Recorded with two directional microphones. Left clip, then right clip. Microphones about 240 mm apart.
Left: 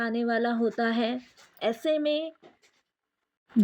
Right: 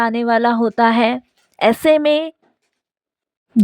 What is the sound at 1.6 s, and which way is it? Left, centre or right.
Speech, right.